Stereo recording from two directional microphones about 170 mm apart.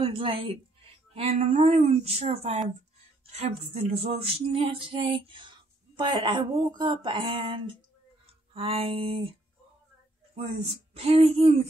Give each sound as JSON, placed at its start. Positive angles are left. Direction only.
{"t": 0.0, "sound": "a woman's voice", "side_deg": -30}
{"t": 3.3, "sound": "music", "side_deg": -40}
{"t": 8.5, "sound": "speech", "side_deg": -35}
{"t": 10.3, "sound": "speech", "side_deg": -35}